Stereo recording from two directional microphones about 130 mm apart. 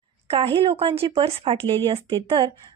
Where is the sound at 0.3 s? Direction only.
45° right (ahead or behind).